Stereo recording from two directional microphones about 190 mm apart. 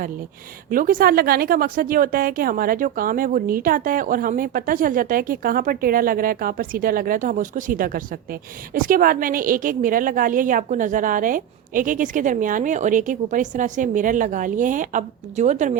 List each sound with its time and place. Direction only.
0.7 s a woman's voice: 45° right (ahead or behind)